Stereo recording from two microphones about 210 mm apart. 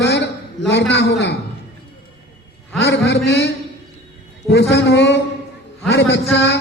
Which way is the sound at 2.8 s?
55° left (ahead or behind).